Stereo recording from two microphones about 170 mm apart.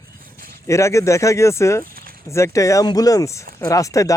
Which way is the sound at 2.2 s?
15° left (ahead or behind).